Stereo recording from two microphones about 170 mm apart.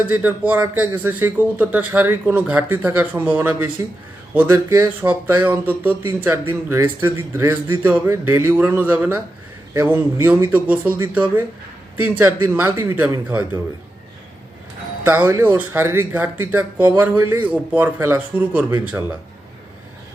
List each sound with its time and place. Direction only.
0.0 s speech: 10° right (ahead or behind)
15.0 s speech: 10° right (ahead or behind)